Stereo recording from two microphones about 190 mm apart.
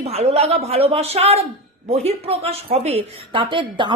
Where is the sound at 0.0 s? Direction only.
35° right (ahead or behind).